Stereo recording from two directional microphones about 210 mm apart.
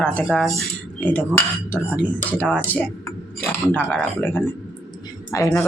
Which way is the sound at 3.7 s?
10° left (ahead or behind).